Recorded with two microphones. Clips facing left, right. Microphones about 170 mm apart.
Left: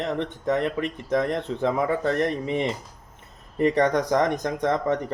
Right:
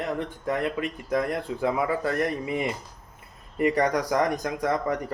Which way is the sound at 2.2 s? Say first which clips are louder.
Left 2 dB; 25° left (ahead or behind).